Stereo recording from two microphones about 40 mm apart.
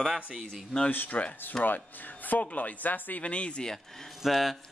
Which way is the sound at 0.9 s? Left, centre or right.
Left.